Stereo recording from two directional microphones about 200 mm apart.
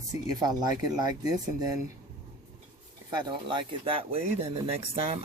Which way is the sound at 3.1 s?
25° right (ahead or behind).